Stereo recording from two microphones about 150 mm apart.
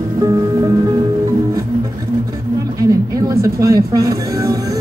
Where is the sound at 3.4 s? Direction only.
20° right (ahead or behind).